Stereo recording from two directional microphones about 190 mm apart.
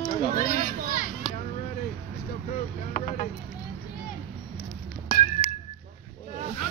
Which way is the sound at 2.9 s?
40° left (ahead or behind).